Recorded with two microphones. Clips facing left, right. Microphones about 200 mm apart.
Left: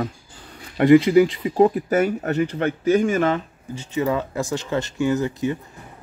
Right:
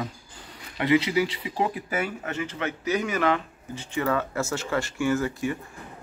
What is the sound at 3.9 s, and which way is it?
Speech, 15° left (ahead or behind).